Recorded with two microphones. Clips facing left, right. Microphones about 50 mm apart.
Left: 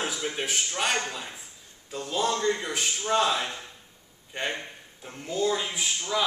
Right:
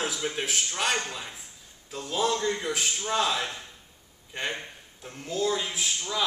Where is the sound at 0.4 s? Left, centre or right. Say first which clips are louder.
Left 1 dB; centre.